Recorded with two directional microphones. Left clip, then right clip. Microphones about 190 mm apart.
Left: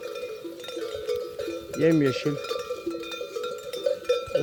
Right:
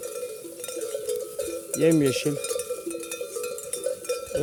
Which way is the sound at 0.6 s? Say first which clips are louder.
Right 1 dB; 50° right (ahead or behind).